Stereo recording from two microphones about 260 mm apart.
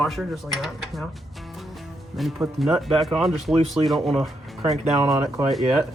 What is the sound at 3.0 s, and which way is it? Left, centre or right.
Speech, centre.